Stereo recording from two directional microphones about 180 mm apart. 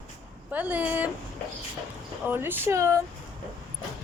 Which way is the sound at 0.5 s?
10° right (ahead or behind).